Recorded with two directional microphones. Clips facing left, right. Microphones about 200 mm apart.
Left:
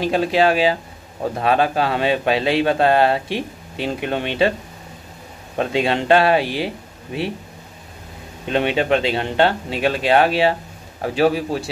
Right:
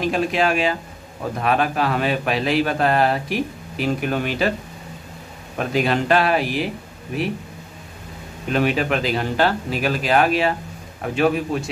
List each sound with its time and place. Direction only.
0.0 s speech: 30° left (ahead or behind)
5.6 s speech: 25° left (ahead or behind)
8.5 s a man's voice: 30° left (ahead or behind)